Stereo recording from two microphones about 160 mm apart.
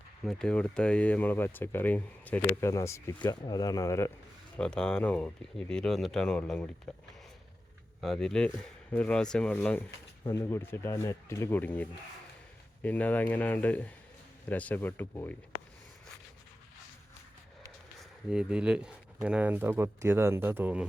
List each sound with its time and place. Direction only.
0.3 s speech: 5° left (ahead or behind)
4.5 s speech: 5° left (ahead or behind)
8.0 s speech: centre (ahead or behind)
18.3 s speech: 5° right (ahead or behind)